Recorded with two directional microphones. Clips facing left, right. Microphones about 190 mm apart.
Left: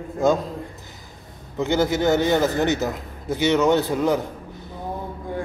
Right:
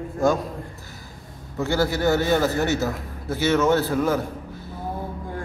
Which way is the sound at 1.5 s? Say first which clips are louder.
Left 2 dB; 20° left (ahead or behind).